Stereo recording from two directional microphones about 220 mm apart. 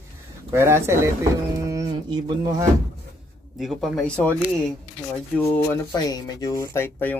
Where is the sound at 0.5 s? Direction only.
10° right (ahead or behind).